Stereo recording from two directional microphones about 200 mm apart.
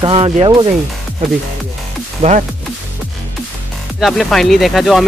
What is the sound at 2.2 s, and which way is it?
Speech, 30° right (ahead or behind).